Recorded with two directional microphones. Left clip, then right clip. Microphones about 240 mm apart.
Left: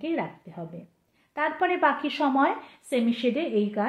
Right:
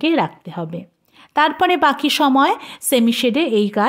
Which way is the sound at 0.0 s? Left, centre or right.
Right.